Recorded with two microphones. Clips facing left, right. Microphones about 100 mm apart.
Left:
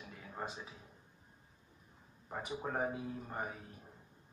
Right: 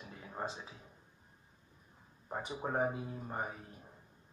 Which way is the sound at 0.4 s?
20° right (ahead or behind).